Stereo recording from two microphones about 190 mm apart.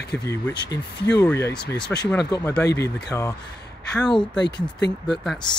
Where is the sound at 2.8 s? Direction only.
20° left (ahead or behind).